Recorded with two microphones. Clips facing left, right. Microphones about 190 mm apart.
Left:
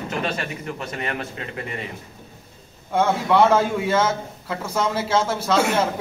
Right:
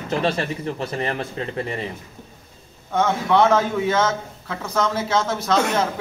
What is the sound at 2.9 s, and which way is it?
A man's voice, 10° left (ahead or behind).